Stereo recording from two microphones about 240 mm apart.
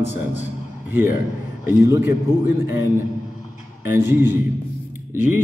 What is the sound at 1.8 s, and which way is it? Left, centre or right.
Speech, centre.